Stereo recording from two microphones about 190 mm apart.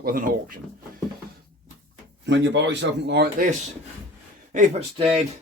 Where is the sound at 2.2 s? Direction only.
70° right (ahead or behind).